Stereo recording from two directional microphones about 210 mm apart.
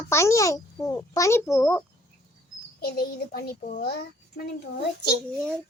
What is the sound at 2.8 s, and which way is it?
A child's voice, 45° left (ahead or behind).